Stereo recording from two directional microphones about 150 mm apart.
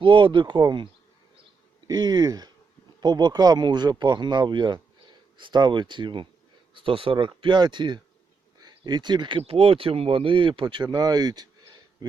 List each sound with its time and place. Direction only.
0.0 s speech: 30° right (ahead or behind)
1.9 s speech: 30° right (ahead or behind)